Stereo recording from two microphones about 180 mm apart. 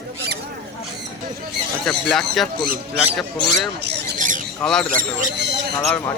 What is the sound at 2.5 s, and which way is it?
Speech, 55° right (ahead or behind).